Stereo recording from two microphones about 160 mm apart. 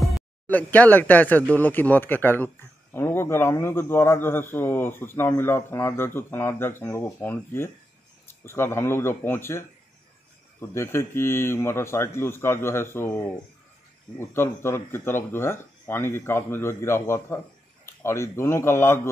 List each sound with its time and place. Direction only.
0.5 s speech: 10° left (ahead or behind)